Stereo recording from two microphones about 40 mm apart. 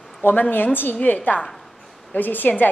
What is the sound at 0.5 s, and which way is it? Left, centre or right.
Speech, left.